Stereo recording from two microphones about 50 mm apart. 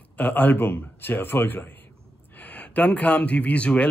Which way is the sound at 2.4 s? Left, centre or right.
Left.